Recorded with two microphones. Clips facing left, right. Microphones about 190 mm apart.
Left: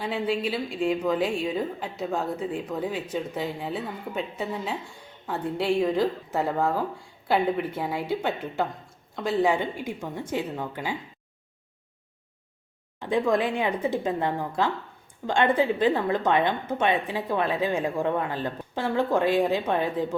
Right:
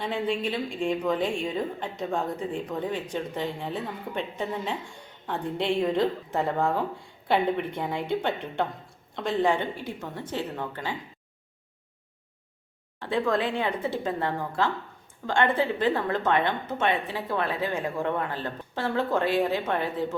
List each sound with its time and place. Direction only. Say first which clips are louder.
0.0 s a woman's voice: left 1 dB; 5° left (ahead or behind)
13.0 s a woman's voice: left 2 dB; 15° left (ahead or behind)